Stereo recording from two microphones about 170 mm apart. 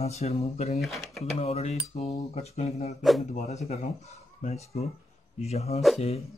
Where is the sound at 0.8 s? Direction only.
Centre (ahead or behind).